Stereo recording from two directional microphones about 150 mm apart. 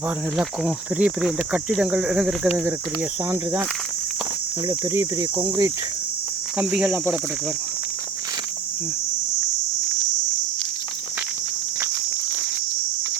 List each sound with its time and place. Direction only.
0.3 s speech: 5° right (ahead or behind)
4.7 s speech: 20° right (ahead or behind)
6.6 s speech: 10° right (ahead or behind)